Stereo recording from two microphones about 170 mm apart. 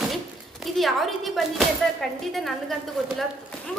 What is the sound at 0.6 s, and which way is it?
Speech, centre (ahead or behind).